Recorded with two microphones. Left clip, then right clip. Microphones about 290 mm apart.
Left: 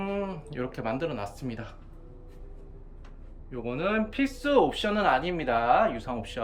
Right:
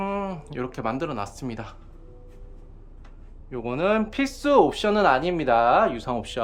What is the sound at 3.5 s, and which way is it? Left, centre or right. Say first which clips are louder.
Speech: right 5 dB; centre.